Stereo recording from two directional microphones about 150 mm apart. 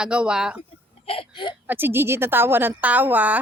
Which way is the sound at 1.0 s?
40° left (ahead or behind).